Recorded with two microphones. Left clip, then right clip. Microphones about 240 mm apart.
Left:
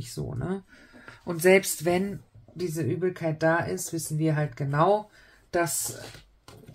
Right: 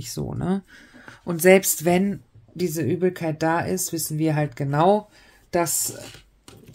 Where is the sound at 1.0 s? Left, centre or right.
Right.